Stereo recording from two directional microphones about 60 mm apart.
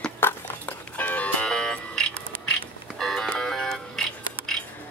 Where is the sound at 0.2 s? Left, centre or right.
Left.